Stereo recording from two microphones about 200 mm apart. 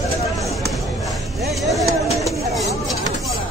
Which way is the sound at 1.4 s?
Centre (ahead or behind).